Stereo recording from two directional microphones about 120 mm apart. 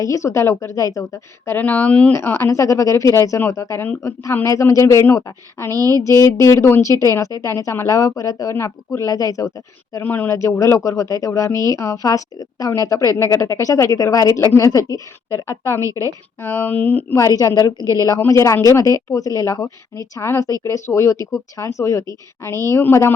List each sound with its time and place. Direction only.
0.0 s speech: 25° left (ahead or behind)
1.5 s speech: 15° left (ahead or behind)
5.7 s speech: 30° right (ahead or behind)
6.0 s speech: 25° left (ahead or behind)
9.9 s speech: 15° left (ahead or behind)
15.8 s a woman's voice: 25° right (ahead or behind)
16.4 s speech: 15° left (ahead or behind)
17.1 s a woman's voice: 25° left (ahead or behind)